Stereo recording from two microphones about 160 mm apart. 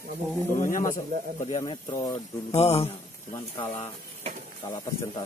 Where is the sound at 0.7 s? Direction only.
60° left (ahead or behind).